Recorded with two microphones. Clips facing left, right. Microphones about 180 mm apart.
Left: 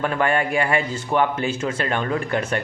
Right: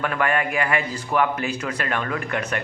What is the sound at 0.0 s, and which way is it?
A man's voice, 30° left (ahead or behind).